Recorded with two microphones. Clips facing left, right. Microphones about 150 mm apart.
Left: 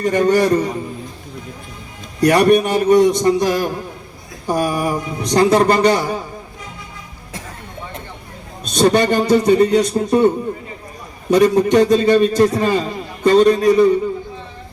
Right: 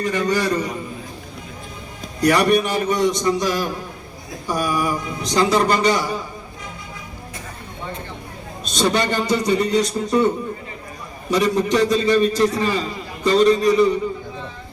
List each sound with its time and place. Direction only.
0.0 s a man's voice: 50° left (ahead or behind)
2.2 s a man's voice: 55° left (ahead or behind)
8.7 s a man's voice: 50° left (ahead or behind)
11.3 s a man's voice: 55° left (ahead or behind)